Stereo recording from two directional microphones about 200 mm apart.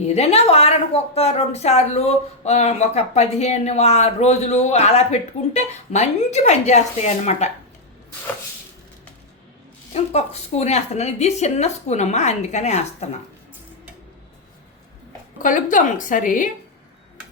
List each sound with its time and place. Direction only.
0.0 s a woman's voice: 35° left (ahead or behind)
9.9 s a woman's voice: 30° left (ahead or behind)
15.4 s a woman's voice: 40° left (ahead or behind)